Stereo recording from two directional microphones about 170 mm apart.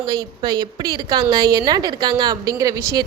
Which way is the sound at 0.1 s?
20° right (ahead or behind).